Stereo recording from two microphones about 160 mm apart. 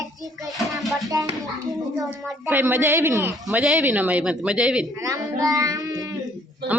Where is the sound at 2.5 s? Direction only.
15° right (ahead or behind).